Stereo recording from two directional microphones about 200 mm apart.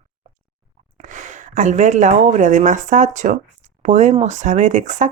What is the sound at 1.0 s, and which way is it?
Speech, 40° right (ahead or behind).